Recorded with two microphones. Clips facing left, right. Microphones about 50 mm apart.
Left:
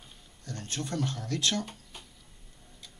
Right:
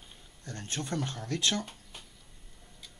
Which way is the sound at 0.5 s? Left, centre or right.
Right.